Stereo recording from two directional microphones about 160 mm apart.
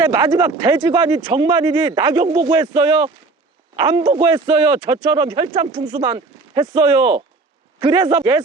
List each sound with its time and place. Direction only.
0.1 s speech: 25° right (ahead or behind)